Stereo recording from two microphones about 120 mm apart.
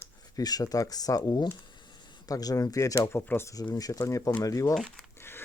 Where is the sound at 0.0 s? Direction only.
30° left (ahead or behind).